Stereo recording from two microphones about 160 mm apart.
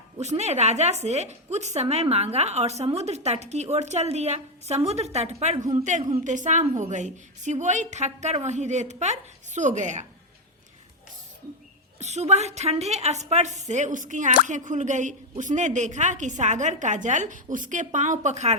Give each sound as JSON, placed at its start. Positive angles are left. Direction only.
{"t": 0.2, "sound": "speech", "side_deg": -45}
{"t": 11.9, "sound": "speech", "side_deg": -45}